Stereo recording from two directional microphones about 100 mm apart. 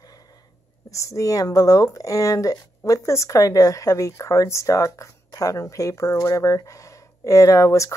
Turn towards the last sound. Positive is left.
turn(degrees=30)  # may be behind; listen again after turning